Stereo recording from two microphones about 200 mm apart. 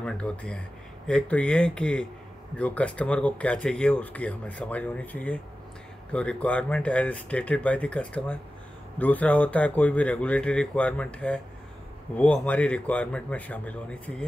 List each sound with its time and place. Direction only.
0.0 s speech: 5° left (ahead or behind)